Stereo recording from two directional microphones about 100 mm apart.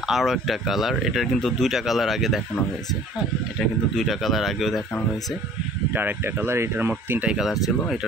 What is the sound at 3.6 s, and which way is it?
Speech, 5° left (ahead or behind).